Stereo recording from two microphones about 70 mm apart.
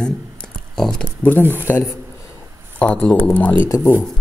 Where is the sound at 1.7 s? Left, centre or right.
Left.